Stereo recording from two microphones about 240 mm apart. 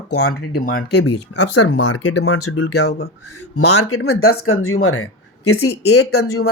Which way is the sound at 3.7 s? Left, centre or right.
Left.